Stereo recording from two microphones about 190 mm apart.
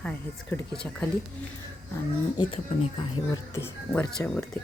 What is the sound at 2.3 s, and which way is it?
Speech, 25° left (ahead or behind).